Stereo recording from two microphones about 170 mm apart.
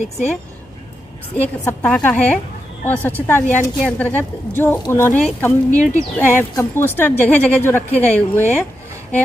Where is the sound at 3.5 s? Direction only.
10° left (ahead or behind).